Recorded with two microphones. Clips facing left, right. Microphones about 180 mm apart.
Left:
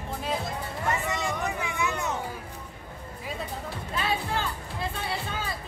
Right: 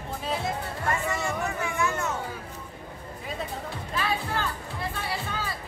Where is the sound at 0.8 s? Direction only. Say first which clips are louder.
Even; 15° left (ahead or behind).